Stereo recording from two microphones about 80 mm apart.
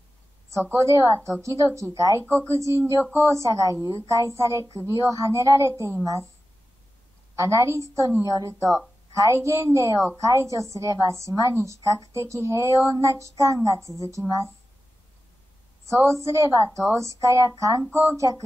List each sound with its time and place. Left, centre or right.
0.7 s speech: right
2.2 s speech: right
7.3 s speech: right
15.8 s speech: right